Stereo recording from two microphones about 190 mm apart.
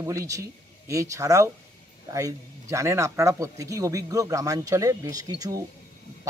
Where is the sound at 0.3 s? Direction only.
15° right (ahead or behind).